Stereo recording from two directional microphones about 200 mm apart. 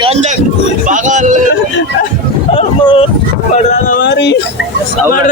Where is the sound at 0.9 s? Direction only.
40° right (ahead or behind).